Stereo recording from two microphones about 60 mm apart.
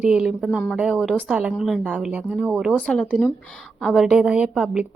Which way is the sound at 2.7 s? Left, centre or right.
Centre.